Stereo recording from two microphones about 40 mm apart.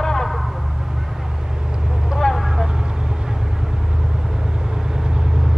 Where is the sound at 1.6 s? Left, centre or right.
Centre.